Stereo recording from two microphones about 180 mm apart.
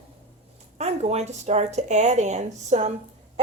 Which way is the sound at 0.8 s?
35° right (ahead or behind).